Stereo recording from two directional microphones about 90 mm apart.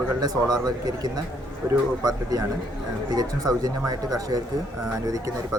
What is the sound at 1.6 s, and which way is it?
Speech, 30° right (ahead or behind).